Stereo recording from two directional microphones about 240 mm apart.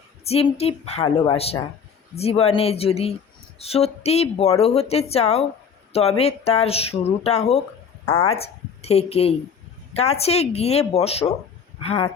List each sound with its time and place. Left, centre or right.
0.3 s speech: left
8.0 s a woman's voice: centre
8.3 s speech: left